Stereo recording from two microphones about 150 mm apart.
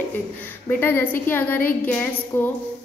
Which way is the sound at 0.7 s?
15° left (ahead or behind).